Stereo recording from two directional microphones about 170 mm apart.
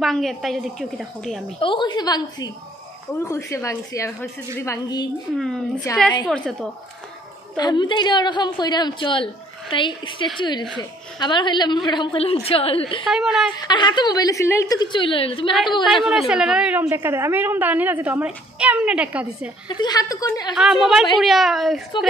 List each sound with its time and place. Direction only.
0.0 s a woman's voice: centre (ahead or behind)
1.6 s a woman's voice: 30° left (ahead or behind)
5.3 s a woman's voice: centre (ahead or behind)
7.5 s a woman's voice: 25° left (ahead or behind)
13.0 s a woman's voice: centre (ahead or behind)
13.7 s a woman's voice: 25° left (ahead or behind)
15.8 s a woman's voice: centre (ahead or behind)
19.7 s a woman's voice: 25° left (ahead or behind)
20.5 s a woman's voice: centre (ahead or behind)